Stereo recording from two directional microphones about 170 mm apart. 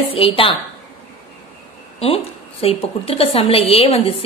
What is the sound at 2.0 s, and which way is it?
A woman's voice, 35° left (ahead or behind).